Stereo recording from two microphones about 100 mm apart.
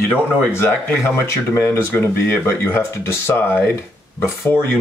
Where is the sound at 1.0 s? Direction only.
25° left (ahead or behind).